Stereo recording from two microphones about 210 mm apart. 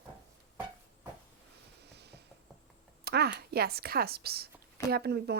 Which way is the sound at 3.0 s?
50° right (ahead or behind).